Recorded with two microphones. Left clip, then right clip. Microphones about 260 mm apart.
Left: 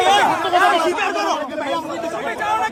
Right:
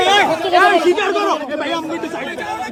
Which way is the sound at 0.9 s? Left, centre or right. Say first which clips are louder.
Right 3 dB; right.